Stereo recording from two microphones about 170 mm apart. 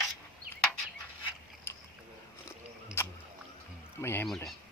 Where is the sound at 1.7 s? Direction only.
15° left (ahead or behind).